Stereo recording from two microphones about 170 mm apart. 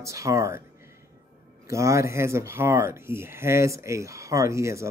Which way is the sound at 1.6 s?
20° right (ahead or behind).